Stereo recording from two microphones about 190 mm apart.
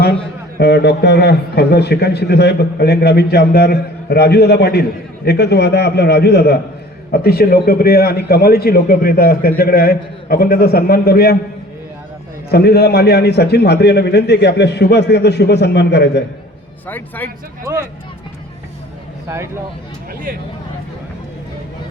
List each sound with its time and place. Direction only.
0.6 s a man's voice: 60° left (ahead or behind)
12.5 s a man's voice: 60° left (ahead or behind)
16.8 s a man's voice: 10° left (ahead or behind)
17.6 s speech: 15° right (ahead or behind)